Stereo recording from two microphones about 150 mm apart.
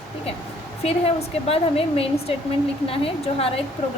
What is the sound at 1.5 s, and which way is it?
A woman's voice, 40° left (ahead or behind).